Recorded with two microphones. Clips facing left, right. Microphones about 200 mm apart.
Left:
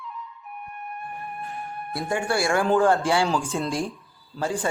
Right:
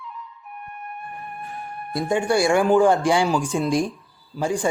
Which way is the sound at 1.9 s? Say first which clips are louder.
Right 5 dB; 15° right (ahead or behind).